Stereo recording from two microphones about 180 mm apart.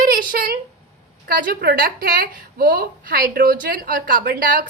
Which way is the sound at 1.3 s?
55° right (ahead or behind).